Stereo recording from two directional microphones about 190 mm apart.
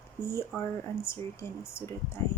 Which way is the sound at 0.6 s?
15° left (ahead or behind).